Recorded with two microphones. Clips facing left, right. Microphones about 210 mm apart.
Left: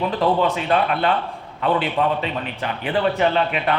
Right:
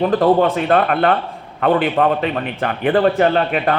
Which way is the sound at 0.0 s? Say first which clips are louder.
Right 6 dB; 50° right (ahead or behind).